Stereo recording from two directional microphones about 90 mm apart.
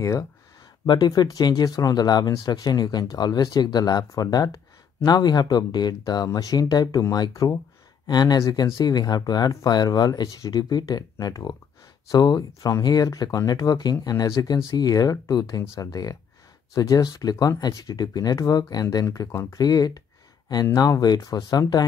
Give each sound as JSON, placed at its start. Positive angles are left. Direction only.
{"t": 0.8, "sound": "speech", "side_deg": 50}
{"t": 19.0, "sound": "speech", "side_deg": 35}